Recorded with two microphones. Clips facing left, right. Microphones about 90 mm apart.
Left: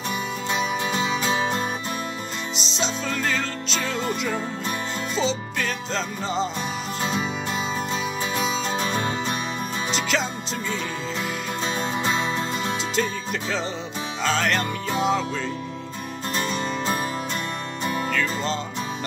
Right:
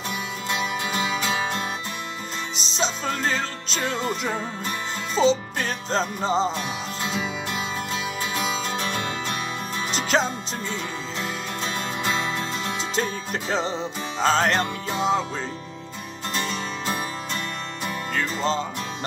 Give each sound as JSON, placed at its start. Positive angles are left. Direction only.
{"t": 0.9, "sound": "music", "side_deg": 25}
{"t": 2.6, "sound": "music", "side_deg": -40}
{"t": 9.9, "sound": "music", "side_deg": -40}
{"t": 12.9, "sound": "music", "side_deg": -35}
{"t": 16.3, "sound": "music", "side_deg": 5}
{"t": 18.1, "sound": "music", "side_deg": -35}